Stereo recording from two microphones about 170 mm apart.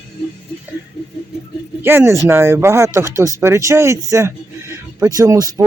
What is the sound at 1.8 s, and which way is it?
Speech, 15° right (ahead or behind).